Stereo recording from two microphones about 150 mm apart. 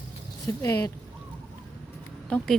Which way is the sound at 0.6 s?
20° left (ahead or behind).